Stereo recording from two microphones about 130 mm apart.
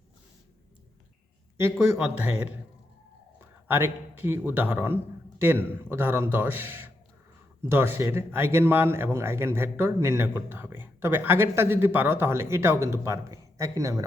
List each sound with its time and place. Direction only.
1.5 s speech: 20° right (ahead or behind)
3.7 s speech: 15° right (ahead or behind)